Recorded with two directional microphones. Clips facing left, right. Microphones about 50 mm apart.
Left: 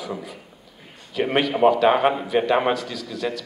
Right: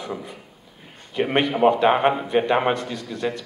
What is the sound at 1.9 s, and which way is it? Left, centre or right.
A man's voice, centre.